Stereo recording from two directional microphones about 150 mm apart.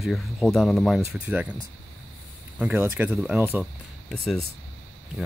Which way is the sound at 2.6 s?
10° right (ahead or behind).